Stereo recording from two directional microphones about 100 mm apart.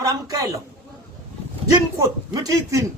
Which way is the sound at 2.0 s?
35° right (ahead or behind).